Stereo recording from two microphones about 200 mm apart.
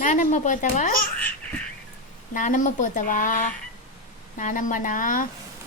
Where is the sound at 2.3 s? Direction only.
40° left (ahead or behind).